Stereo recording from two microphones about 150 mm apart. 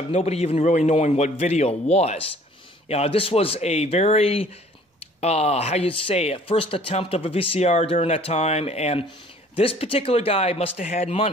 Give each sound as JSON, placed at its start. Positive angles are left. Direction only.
{"t": 0.1, "sound": "a man's voice", "side_deg": 45}